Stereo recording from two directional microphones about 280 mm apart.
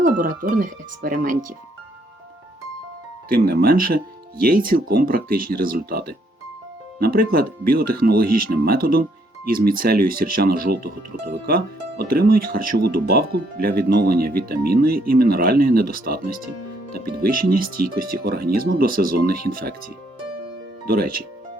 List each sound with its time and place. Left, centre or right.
0.2 s speech: right
3.2 s speech: right